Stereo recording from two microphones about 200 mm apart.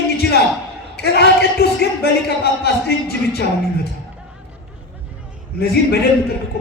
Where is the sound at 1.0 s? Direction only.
55° left (ahead or behind).